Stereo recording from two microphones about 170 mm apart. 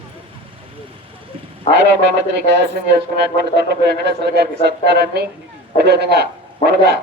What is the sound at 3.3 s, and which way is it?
A man's voice, 75° right (ahead or behind).